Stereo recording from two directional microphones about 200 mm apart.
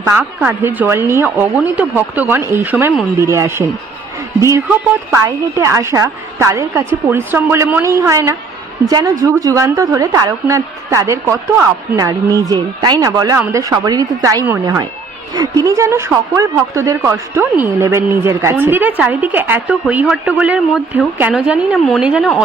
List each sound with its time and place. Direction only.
0.0 s a woman's voice: 10° right (ahead or behind)